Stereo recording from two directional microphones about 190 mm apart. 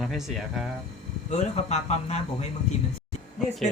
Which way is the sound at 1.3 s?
35° left (ahead or behind).